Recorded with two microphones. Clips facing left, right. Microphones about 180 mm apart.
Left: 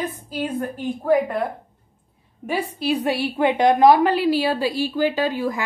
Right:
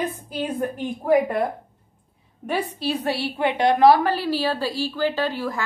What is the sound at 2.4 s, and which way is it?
A woman's voice, 10° left (ahead or behind).